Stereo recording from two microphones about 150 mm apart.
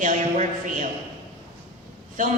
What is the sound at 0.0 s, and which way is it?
Speech, 60° right (ahead or behind).